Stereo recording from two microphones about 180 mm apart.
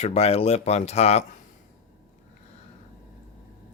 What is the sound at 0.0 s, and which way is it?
Speech, 35° left (ahead or behind).